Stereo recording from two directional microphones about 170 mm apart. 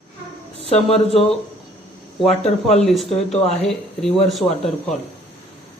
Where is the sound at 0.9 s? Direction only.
35° left (ahead or behind).